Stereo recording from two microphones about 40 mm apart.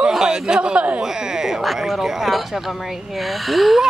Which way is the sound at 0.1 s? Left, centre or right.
Centre.